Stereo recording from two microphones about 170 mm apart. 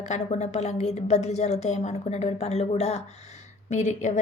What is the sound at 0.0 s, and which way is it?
A woman's voice, 40° left (ahead or behind).